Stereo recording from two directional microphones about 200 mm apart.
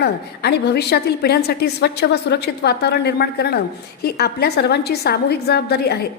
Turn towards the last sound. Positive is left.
turn(degrees=55)  # may be behind; listen again after turning